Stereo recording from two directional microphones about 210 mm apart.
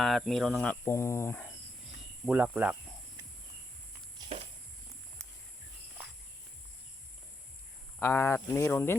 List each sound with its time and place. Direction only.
0.0 s speech: centre (ahead or behind)
2.2 s speech: 5° right (ahead or behind)
4.2 s walk: 20° right (ahead or behind)
7.9 s speech: 10° left (ahead or behind)